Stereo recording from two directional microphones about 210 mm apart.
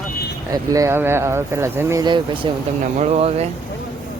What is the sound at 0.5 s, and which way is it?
Speech, 15° right (ahead or behind).